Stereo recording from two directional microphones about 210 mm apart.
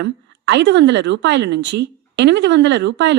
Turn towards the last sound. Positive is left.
turn(degrees=-60)  # may be behind; listen again after turning